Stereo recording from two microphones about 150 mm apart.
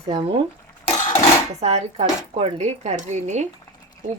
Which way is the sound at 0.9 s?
45° left (ahead or behind).